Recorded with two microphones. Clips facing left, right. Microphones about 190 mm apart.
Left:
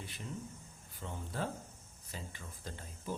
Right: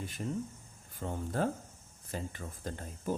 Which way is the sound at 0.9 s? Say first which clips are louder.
Right 7 dB; 45° right (ahead or behind).